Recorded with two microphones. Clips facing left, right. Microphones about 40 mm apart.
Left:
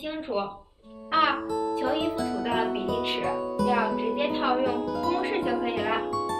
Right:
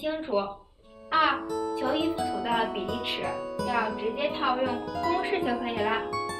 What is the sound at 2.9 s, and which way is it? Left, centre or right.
A woman's voice, centre.